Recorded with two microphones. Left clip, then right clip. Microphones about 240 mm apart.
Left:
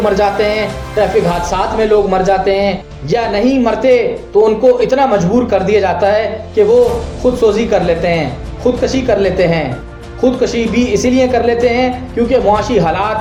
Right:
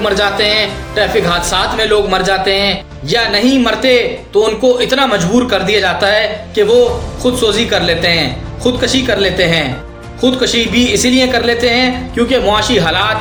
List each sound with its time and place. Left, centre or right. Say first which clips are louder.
0.1 s speech: even; centre